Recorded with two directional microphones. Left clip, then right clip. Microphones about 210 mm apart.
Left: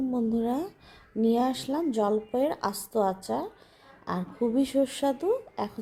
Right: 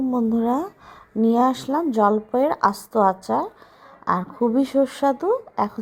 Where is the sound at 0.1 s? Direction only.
15° right (ahead or behind).